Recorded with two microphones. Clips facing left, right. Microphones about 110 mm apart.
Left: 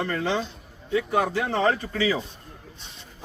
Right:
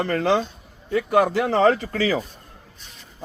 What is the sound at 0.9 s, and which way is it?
Speech, 70° right (ahead or behind).